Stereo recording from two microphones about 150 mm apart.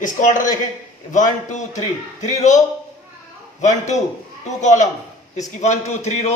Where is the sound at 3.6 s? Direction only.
50° left (ahead or behind).